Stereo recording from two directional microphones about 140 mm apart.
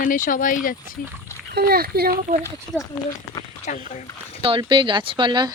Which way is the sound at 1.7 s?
90° right.